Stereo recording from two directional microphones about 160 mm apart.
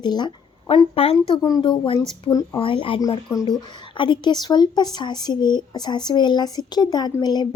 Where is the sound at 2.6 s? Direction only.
35° left (ahead or behind).